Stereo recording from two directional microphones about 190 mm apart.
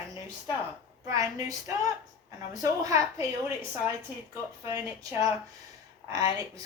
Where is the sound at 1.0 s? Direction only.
20° right (ahead or behind).